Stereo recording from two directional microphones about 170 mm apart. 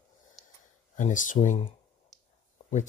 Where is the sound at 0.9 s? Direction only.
50° left (ahead or behind).